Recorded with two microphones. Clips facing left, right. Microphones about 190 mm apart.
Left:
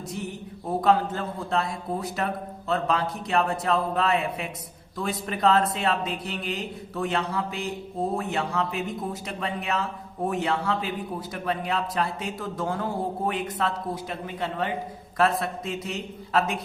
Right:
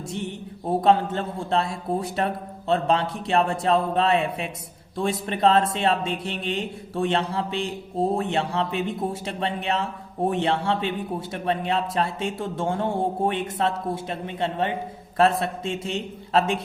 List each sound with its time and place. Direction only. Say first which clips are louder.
0.1 s a man's voice: right 3 dB; 25° right (ahead or behind)